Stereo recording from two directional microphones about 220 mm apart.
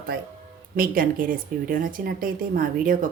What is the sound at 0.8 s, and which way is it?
A woman's voice, 40° right (ahead or behind).